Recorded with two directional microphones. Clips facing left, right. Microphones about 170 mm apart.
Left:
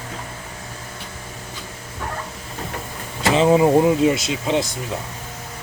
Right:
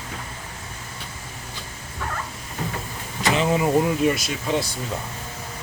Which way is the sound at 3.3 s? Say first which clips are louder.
Left 6 dB; 30° left (ahead or behind).